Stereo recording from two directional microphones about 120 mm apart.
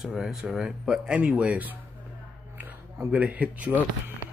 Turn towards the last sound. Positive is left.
turn(degrees=-10)  # may be behind; listen again after turning